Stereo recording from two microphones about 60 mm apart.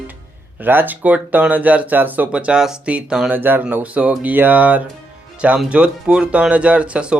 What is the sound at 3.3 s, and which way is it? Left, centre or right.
Speech, right.